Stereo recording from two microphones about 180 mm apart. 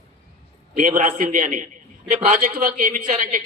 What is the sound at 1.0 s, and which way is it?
A man's voice, 45° right (ahead or behind).